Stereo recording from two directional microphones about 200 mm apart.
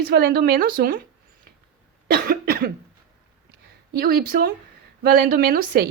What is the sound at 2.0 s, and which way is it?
Speech, 50° right (ahead or behind).